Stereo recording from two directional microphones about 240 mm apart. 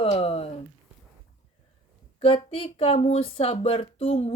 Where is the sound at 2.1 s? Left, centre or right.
Left.